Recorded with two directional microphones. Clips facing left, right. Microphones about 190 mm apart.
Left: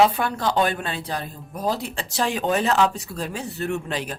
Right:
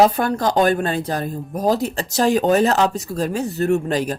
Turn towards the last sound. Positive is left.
turn(degrees=-40)  # may be behind; listen again after turning